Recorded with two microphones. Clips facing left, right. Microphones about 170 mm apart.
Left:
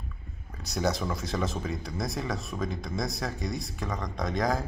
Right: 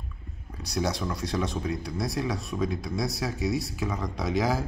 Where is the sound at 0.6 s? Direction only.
Centre (ahead or behind).